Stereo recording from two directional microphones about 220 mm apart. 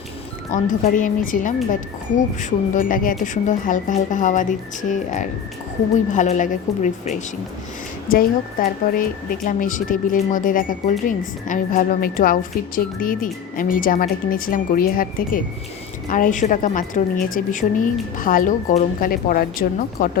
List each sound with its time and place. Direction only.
0.5 s a woman's voice: 35° left (ahead or behind)